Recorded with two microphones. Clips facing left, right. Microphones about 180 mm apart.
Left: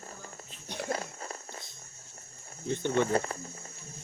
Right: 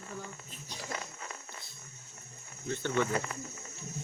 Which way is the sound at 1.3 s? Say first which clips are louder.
Left 4 dB; 45° left (ahead or behind).